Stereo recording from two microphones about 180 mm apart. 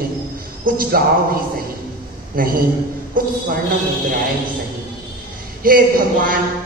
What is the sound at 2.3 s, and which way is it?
A man's voice, 55° right (ahead or behind).